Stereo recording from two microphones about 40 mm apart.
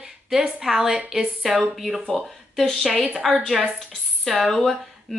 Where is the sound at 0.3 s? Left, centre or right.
Centre.